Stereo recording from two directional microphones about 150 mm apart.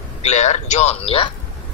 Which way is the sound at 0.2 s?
50° left (ahead or behind).